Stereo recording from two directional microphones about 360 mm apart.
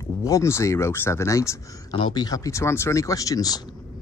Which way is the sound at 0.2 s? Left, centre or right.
Centre.